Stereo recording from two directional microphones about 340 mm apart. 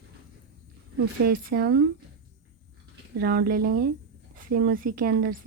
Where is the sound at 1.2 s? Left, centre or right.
Right.